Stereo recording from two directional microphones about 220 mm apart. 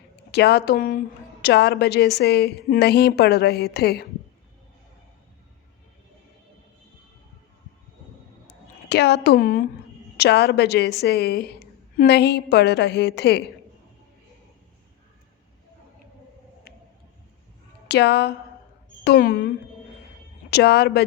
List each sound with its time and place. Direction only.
0.3 s a woman's voice: 50° left (ahead or behind)
8.4 s a sound: 50° left (ahead or behind)
10.2 s a woman's voice: 50° left (ahead or behind)
16.7 s whale vocalization: 45° left (ahead or behind)
17.8 s a woman's voice: 50° left (ahead or behind)